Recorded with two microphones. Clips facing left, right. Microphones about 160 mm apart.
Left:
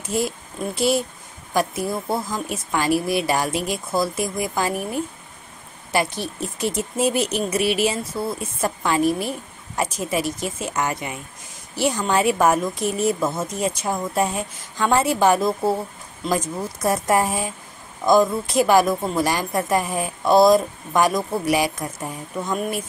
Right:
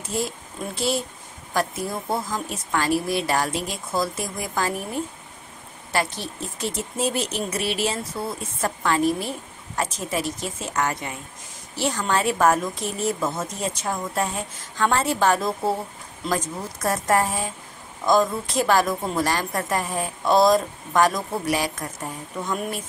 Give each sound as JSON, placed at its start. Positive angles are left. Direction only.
{"t": 0.7, "sound": "a woman's voice", "side_deg": 10}